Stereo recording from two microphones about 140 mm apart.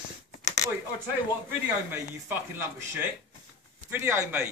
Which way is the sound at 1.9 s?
15° right (ahead or behind).